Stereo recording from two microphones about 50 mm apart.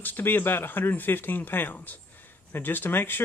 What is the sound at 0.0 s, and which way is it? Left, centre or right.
Speech, left.